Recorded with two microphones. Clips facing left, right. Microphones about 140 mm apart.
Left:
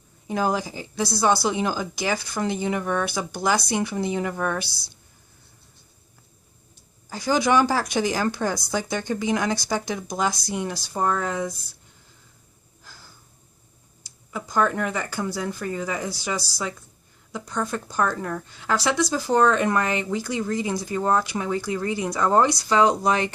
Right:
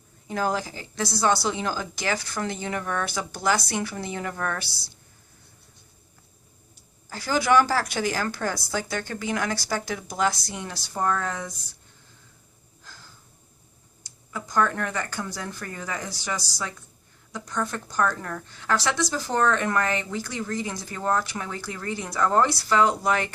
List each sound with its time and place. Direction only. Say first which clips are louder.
0.3 s a woman's voice: left 2 dB; 15° left (ahead or behind)
7.1 s a woman's voice: left 1 dB; 15° left (ahead or behind)
12.8 s a sound: even; 10° left (ahead or behind)
14.3 s a woman's voice: left 2 dB; 10° left (ahead or behind)